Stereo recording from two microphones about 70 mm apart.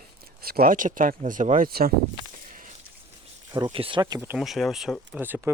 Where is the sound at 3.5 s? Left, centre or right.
Right.